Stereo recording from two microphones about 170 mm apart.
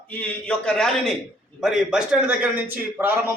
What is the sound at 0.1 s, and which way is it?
A man's voice, 10° left (ahead or behind).